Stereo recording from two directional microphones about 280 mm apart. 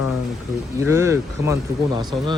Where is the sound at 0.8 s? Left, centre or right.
Centre.